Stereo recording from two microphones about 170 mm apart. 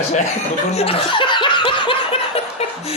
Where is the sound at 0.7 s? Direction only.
35° left (ahead or behind).